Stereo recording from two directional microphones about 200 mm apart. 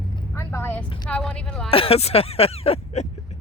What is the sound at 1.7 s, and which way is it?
Speech, 30° left (ahead or behind).